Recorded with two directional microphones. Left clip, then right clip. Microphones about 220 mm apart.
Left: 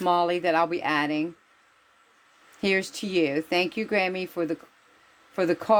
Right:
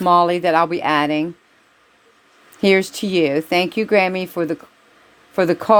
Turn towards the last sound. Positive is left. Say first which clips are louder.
# right 8 dB
turn(degrees=-25)  # may be behind; listen again after turning